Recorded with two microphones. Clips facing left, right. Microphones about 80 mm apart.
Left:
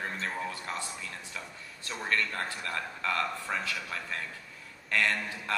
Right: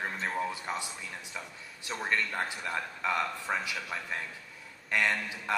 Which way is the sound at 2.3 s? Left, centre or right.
Centre.